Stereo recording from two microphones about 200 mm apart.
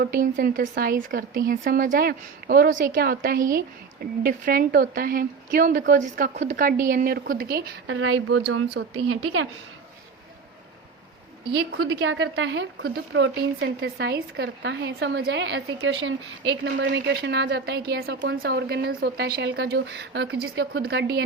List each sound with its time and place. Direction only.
0.0 s speech: 45° right (ahead or behind)
7.9 s speech: 85° right
9.0 s speech: 90° right
11.5 s speech: 80° right; by 21.2 s 55° right (ahead or behind)